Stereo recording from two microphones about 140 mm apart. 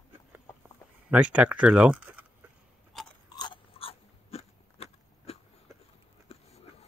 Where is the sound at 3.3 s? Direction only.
35° left (ahead or behind).